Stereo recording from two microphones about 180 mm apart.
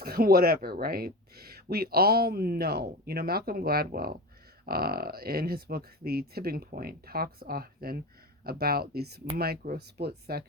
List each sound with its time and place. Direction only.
0.0 s speech: 60° right (ahead or behind)